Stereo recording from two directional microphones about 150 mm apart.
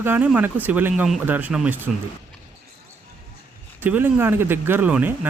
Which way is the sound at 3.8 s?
10° right (ahead or behind).